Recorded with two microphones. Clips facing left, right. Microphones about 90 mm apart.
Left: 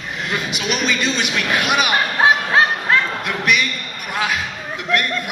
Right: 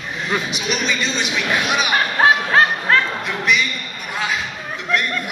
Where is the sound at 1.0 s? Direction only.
5° left (ahead or behind).